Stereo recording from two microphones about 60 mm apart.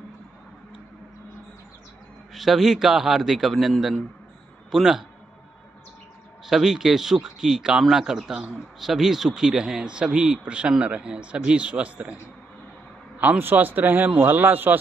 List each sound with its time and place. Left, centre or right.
2.3 s a man's voice: centre
6.4 s speech: centre
13.2 s a man's voice: right